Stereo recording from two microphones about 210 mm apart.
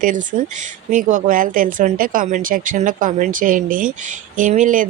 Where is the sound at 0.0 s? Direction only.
40° right (ahead or behind).